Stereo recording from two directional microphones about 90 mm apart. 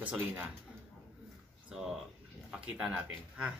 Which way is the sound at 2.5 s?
10° right (ahead or behind).